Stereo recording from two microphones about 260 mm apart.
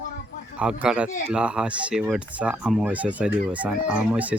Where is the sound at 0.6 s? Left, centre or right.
Centre.